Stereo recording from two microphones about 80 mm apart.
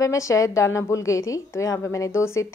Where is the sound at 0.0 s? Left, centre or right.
Left.